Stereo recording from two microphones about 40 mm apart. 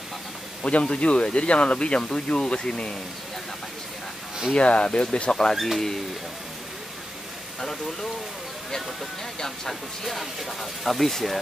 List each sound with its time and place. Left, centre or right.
0.6 s speech: left
4.6 s speech: left
9.4 s speech: centre